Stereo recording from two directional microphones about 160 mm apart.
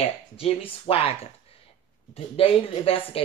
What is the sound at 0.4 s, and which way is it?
Speech, 40° left (ahead or behind).